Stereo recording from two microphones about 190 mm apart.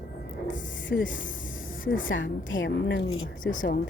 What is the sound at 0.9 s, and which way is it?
Speech, 75° left (ahead or behind).